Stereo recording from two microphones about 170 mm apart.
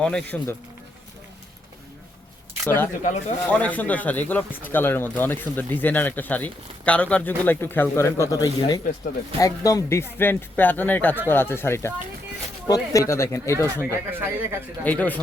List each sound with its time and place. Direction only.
0.0 s speech: 5° left (ahead or behind)
3.0 s speech: 45° left (ahead or behind)
3.5 s speech: 10° left (ahead or behind)
13.9 s speech: 15° right (ahead or behind)
14.8 s speech: 10° left (ahead or behind)